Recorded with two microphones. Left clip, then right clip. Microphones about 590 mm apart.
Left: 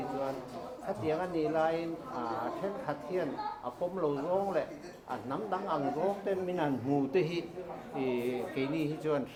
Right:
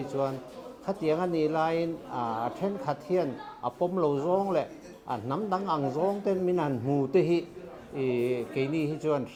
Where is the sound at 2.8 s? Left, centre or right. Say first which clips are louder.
Right 10 dB; right.